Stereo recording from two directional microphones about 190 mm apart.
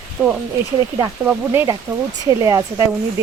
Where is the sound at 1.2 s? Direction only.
10° right (ahead or behind).